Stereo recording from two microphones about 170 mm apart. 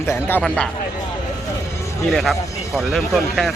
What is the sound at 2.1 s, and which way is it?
Speech, centre (ahead or behind).